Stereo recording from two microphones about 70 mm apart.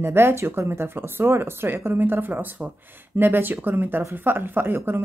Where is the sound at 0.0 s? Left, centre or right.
Right.